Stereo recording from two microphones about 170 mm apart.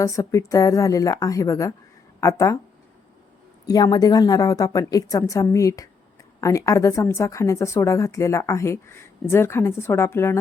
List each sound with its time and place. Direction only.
0.0 s a woman's voice: 20° left (ahead or behind)
3.7 s a woman's voice: 20° left (ahead or behind)